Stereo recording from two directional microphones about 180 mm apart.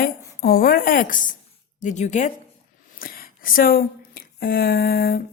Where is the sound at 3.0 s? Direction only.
55° left (ahead or behind).